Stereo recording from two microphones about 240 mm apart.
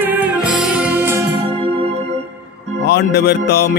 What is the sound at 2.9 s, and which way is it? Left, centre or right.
Music, left.